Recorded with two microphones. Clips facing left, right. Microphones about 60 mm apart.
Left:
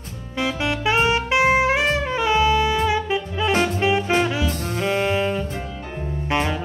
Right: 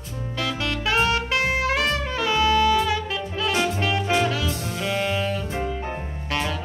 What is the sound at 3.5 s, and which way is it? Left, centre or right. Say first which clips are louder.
Music: left 5 dB; left.